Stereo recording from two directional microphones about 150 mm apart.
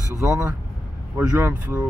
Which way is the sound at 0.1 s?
20° right (ahead or behind).